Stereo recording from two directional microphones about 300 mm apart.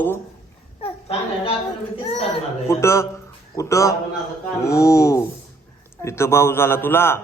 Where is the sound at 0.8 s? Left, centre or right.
Centre.